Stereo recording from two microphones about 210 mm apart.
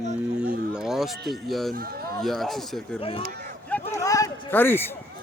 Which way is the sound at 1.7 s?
45° right (ahead or behind).